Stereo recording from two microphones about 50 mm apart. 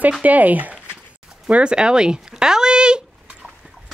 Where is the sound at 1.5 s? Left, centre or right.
Centre.